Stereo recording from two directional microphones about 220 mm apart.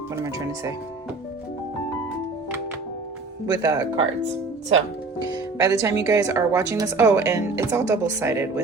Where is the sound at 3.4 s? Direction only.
15° right (ahead or behind).